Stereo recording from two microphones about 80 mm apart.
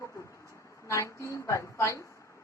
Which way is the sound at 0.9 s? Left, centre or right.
Left.